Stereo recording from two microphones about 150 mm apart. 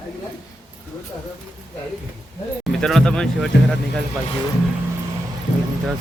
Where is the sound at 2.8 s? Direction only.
5° left (ahead or behind).